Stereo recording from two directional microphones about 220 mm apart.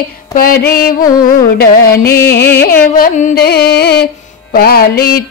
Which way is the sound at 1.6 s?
45° left (ahead or behind).